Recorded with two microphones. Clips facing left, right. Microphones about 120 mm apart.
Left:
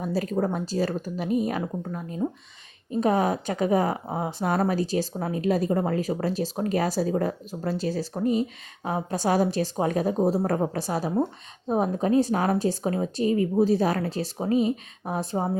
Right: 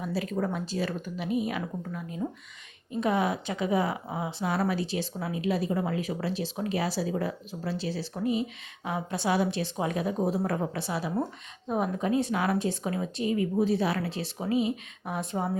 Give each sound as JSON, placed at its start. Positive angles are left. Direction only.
{"t": 0.0, "sound": "a woman's voice", "side_deg": 40}